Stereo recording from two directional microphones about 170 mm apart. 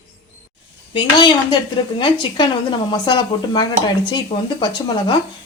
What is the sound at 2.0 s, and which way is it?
Speech, 30° left (ahead or behind).